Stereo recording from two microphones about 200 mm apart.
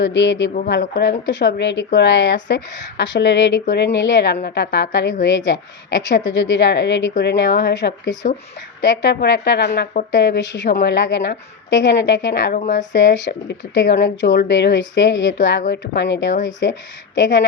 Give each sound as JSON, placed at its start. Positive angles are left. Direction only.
{"t": 0.0, "sound": "a woman's voice", "side_deg": 60}
{"t": 8.1, "sound": "speech", "side_deg": 40}
{"t": 8.8, "sound": "a woman's voice", "side_deg": 60}
{"t": 10.1, "sound": "a woman's voice", "side_deg": 60}
{"t": 12.5, "sound": "speech", "side_deg": 40}
{"t": 12.9, "sound": "a woman's voice", "side_deg": 60}